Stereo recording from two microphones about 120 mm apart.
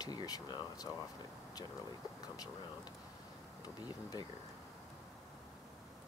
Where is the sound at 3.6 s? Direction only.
35° left (ahead or behind).